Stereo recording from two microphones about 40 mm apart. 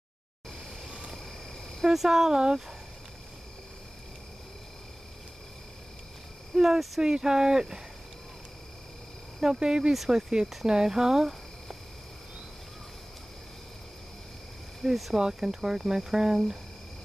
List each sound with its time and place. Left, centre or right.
1.9 s speech: centre
6.5 s speech: centre
9.4 s speech: centre
14.8 s speech: centre
15.1 s speech: centre